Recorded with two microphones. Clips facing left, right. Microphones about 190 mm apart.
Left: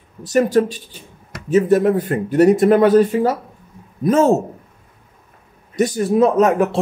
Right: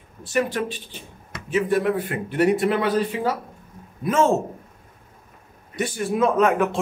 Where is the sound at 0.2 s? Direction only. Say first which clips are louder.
Left 8 dB; 40° left (ahead or behind).